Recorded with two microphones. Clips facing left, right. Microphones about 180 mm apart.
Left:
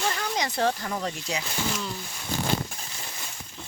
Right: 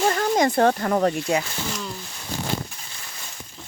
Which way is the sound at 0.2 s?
50° right (ahead or behind).